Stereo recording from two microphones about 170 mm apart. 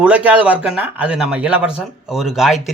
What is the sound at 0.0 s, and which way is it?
A woman's voice, 10° right (ahead or behind).